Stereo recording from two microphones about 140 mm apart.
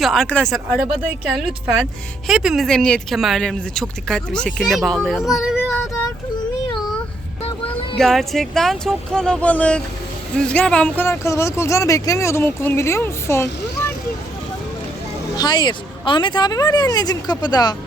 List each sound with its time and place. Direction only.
0.0 s speech: centre (ahead or behind)
7.9 s speech: centre (ahead or behind); by 13.5 s 20° left (ahead or behind)
15.4 s speech: 30° left (ahead or behind)